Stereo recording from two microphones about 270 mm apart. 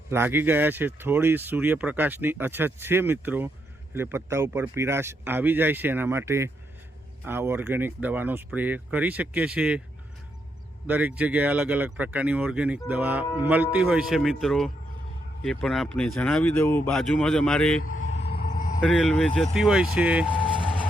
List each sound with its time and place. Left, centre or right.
0.1 s speech: centre
10.8 s speech: centre
17.8 s vehicle: left
18.3 s a sound: left
18.8 s speech: centre
20.3 s vehicle: centre